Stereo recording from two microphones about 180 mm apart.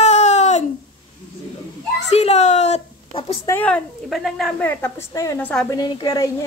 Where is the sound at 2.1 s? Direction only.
40° left (ahead or behind).